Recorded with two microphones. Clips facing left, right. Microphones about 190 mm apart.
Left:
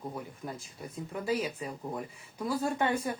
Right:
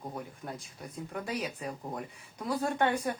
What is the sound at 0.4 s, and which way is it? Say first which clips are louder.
Speech: left 1 dB; centre (ahead or behind).